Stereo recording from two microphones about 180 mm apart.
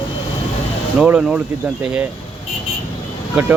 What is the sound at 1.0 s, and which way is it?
Speech, 5° right (ahead or behind).